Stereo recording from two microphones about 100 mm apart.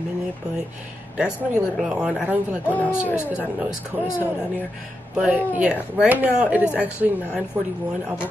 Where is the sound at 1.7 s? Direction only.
5° right (ahead or behind).